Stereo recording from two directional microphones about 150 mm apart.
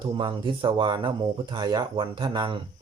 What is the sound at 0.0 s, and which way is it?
Speech, 30° right (ahead or behind).